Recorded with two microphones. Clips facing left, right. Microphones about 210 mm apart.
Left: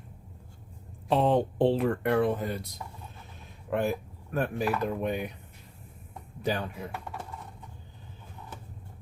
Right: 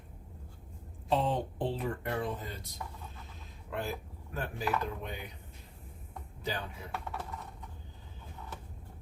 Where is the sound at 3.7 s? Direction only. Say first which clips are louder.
Left 9 dB; 60° left (ahead or behind).